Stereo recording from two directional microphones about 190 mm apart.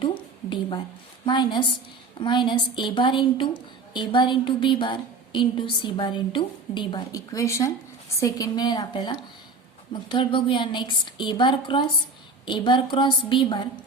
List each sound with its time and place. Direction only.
1.2 s a woman's voice: 25° left (ahead or behind)